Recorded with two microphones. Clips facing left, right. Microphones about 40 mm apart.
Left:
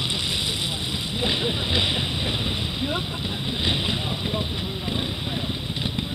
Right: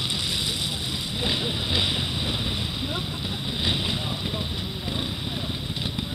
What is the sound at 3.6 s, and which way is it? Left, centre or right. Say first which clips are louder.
Vehicle: left 1 dB; centre.